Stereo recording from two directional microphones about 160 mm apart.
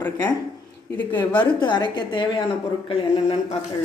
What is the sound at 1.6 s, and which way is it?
A woman's voice, 30° left (ahead or behind).